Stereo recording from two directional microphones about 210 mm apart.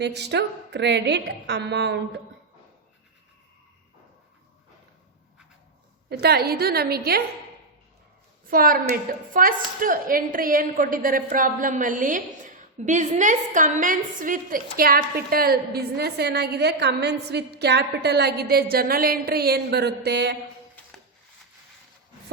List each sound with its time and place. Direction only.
0.0 s a woman's voice: 55° right (ahead or behind)
6.1 s a woman's voice: 50° right (ahead or behind)
8.4 s a woman's voice: 40° right (ahead or behind)